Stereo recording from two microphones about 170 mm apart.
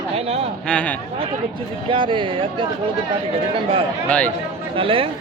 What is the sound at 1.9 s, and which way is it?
Speech, 30° right (ahead or behind).